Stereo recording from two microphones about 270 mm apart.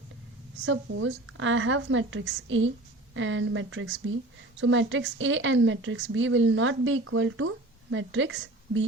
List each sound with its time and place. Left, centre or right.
0.6 s a woman's voice: right